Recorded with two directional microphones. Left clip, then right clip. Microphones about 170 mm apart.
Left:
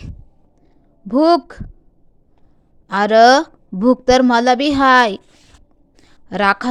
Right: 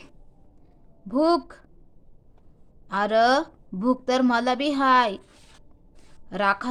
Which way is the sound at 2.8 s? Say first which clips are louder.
Left 10 dB; 35° left (ahead or behind).